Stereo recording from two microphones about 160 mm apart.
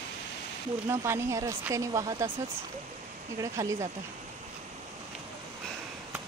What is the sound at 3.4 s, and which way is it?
Speech, 20° right (ahead or behind).